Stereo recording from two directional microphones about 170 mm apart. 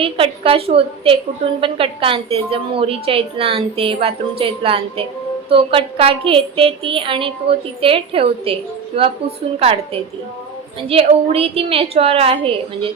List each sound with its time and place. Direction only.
0.0 s a woman's voice: 35° right (ahead or behind)
9.6 s a woman's voice: 35° right (ahead or behind)